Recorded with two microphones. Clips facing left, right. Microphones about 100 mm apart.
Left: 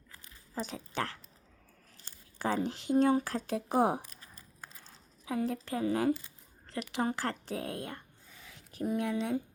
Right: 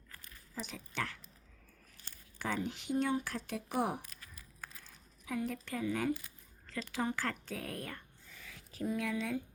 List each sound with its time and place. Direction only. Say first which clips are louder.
0.5 s speech: left 5 dB; 40° left (ahead or behind)
2.4 s speech: left 5 dB; 35° left (ahead or behind)
6.9 s speech: left 3 dB; 30° left (ahead or behind)